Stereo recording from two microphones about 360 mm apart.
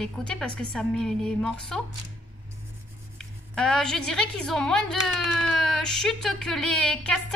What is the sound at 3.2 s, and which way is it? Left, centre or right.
A woman's voice, centre.